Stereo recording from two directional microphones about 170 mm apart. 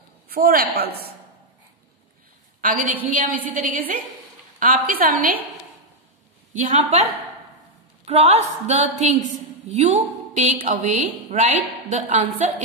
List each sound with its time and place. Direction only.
0.3 s a woman's voice: 60° right (ahead or behind)
2.6 s a woman's voice: 55° right (ahead or behind)
6.5 s a woman's voice: 45° right (ahead or behind)